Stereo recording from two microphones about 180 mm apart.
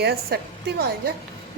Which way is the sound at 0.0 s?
60° right (ahead or behind).